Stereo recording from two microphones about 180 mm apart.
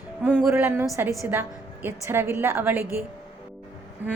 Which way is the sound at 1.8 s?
10° right (ahead or behind).